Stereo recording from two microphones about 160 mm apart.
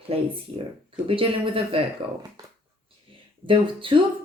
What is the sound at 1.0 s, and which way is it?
Speech, 35° right (ahead or behind).